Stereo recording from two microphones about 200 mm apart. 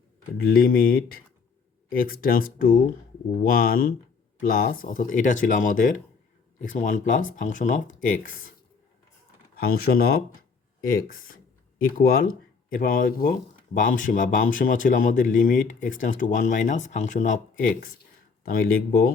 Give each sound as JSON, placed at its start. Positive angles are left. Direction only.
{"t": 0.4, "sound": "speech", "side_deg": 50}
{"t": 9.6, "sound": "speech", "side_deg": 50}